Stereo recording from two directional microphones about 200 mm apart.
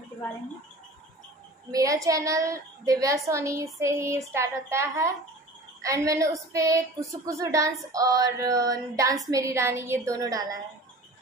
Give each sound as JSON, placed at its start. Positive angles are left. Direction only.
{"t": 1.7, "sound": "a woman's voice", "side_deg": -15}